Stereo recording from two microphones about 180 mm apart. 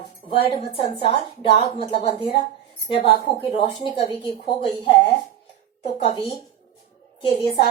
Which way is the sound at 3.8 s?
30° left (ahead or behind).